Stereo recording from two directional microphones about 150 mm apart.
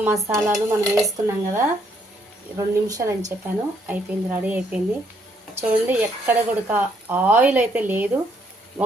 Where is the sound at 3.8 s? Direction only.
10° right (ahead or behind).